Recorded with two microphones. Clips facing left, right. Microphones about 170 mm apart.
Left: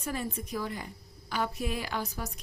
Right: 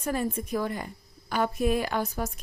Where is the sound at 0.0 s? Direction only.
50° right (ahead or behind).